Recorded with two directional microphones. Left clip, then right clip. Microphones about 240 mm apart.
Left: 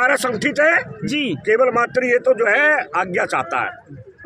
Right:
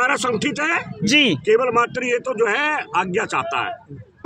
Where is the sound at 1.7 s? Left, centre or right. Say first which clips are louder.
Left 2 dB; centre.